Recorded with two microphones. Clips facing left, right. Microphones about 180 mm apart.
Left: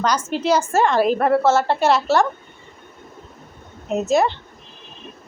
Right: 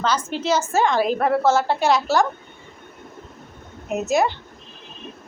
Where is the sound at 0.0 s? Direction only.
10° left (ahead or behind).